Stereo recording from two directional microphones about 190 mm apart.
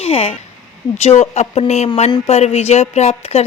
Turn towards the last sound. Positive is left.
turn(degrees=35)  # may be behind; listen again after turning